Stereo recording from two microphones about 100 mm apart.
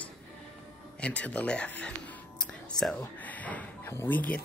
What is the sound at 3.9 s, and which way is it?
Speech, 20° left (ahead or behind).